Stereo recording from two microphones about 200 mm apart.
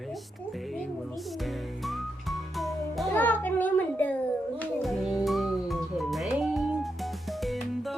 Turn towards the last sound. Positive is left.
turn(degrees=0)  # may be behind; listen again after turning